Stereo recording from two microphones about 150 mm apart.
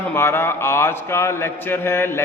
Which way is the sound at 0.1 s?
15° left (ahead or behind).